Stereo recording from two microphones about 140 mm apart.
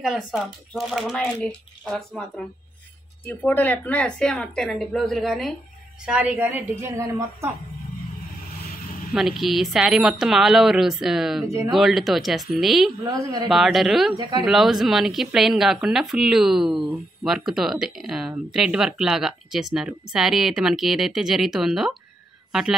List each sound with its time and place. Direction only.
0.0 s speech: centre (ahead or behind)
6.0 s a woman's voice: 10° right (ahead or behind)
9.1 s speech: centre (ahead or behind)
13.0 s a woman's voice: 25° right (ahead or behind)
13.5 s speech: centre (ahead or behind)